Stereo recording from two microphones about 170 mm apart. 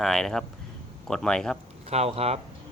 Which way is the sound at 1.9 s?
35° right (ahead or behind).